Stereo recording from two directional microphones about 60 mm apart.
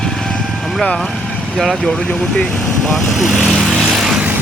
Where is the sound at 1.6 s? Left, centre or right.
Centre.